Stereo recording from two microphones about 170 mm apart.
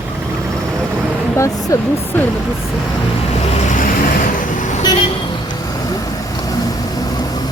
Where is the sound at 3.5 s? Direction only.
50° left (ahead or behind).